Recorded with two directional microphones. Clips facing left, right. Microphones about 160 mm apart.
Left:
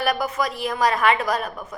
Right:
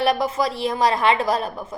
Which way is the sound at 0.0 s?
25° right (ahead or behind).